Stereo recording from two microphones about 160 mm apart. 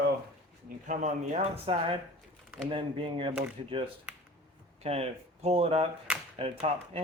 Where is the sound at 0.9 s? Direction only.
50° right (ahead or behind).